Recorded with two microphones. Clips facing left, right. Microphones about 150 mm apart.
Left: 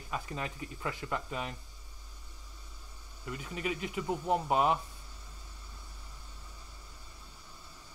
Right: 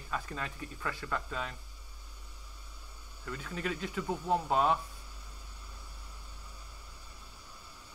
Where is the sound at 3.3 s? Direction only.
15° left (ahead or behind).